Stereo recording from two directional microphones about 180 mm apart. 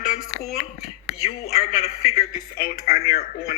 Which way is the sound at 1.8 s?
35° left (ahead or behind).